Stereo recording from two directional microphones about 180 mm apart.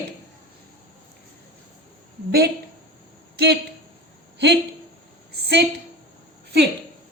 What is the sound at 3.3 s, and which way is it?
Speech, 65° right (ahead or behind).